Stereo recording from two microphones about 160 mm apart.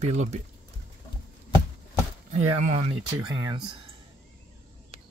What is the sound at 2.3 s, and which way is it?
Speech, 45° right (ahead or behind).